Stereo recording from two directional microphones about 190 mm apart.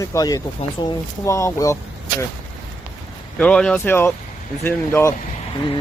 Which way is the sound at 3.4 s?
5° left (ahead or behind).